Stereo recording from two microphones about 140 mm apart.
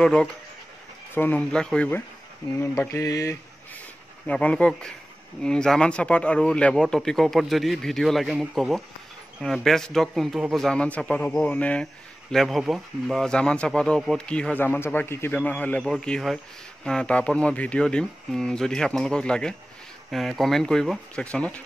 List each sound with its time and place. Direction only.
0.0 s a man's voice: 5° left (ahead or behind)
2.6 s mantra: 20° left (ahead or behind)
4.3 s a man's voice: 10° left (ahead or behind)